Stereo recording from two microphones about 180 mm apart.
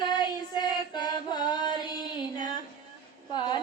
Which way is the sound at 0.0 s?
25° left (ahead or behind).